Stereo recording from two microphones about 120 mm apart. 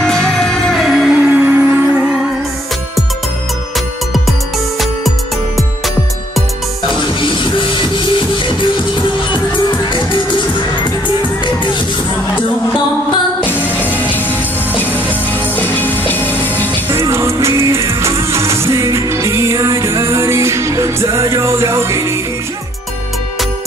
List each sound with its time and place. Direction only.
0.0 s music: 5° left (ahead or behind)
1.3 s music: 15° right (ahead or behind)
7.2 s music: 45° left (ahead or behind)
13.5 s music: 15° left (ahead or behind)
16.9 s music: 25° right (ahead or behind)